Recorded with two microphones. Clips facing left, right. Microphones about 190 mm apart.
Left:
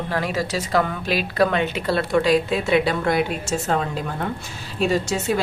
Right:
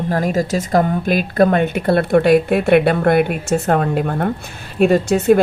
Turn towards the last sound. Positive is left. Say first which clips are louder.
# right 9 dB
turn(degrees=-55)  # may be behind; listen again after turning